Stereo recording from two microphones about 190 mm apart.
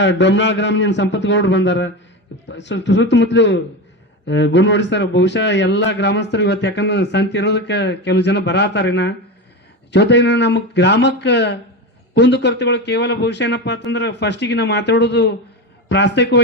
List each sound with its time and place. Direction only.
0.0 s a man's voice: 70° left (ahead or behind)